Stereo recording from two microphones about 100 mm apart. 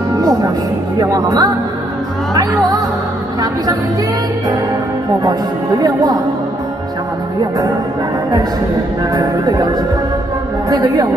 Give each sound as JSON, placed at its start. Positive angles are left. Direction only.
{"t": 0.2, "sound": "music", "side_deg": -40}
{"t": 0.9, "sound": "speech", "side_deg": -40}
{"t": 5.8, "sound": "speech", "side_deg": -40}
{"t": 9.1, "sound": "speech", "side_deg": -40}